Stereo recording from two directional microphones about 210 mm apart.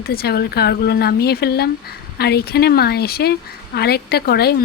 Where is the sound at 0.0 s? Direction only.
45° left (ahead or behind).